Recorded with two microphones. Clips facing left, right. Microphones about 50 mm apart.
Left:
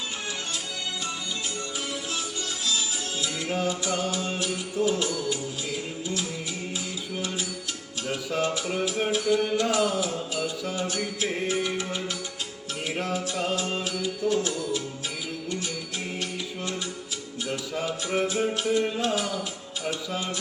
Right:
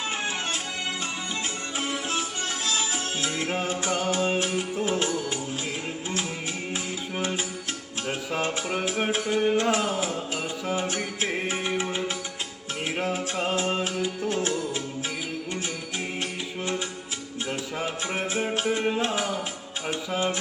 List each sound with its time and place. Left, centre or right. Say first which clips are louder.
2.6 s music: even; right
7.2 s music: right 3 dB; right
17.4 s music: even; right